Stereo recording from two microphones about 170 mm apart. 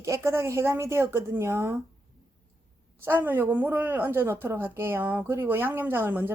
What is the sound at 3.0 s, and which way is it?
Speech, 10° right (ahead or behind).